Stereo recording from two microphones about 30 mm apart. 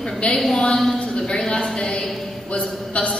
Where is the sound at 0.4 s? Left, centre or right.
Centre.